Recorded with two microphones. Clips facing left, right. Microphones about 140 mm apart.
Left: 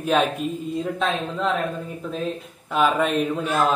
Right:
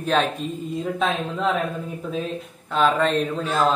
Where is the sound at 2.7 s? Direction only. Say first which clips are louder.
Right 1 dB; 10° left (ahead or behind).